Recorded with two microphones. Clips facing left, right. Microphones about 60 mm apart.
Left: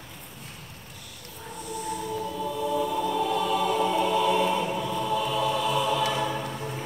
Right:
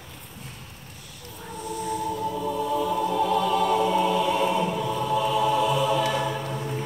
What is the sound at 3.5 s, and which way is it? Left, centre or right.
Music, centre.